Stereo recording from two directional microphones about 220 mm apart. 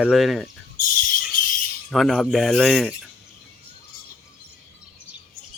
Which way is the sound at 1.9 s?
Centre (ahead or behind).